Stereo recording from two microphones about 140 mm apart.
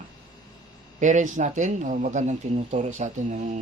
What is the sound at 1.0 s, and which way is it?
Speech, 60° right (ahead or behind).